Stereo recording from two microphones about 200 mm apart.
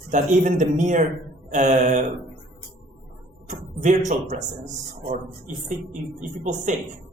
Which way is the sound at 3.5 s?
35° right (ahead or behind).